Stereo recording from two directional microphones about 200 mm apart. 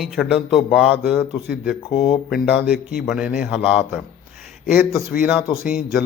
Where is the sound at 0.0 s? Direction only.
Centre (ahead or behind).